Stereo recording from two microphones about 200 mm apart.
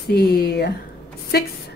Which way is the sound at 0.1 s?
50° left (ahead or behind).